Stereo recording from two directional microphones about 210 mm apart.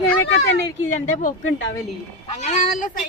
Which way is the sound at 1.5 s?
60° left (ahead or behind).